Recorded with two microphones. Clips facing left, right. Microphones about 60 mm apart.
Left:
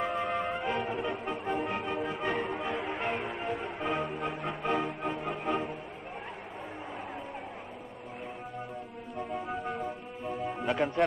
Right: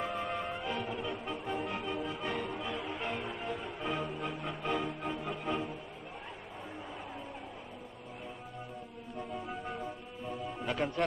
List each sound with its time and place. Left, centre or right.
0.1 s music: left
9.7 s music: left
10.6 s a man's voice: centre